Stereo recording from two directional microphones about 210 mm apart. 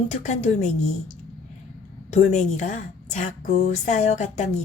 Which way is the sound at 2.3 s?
35° left (ahead or behind).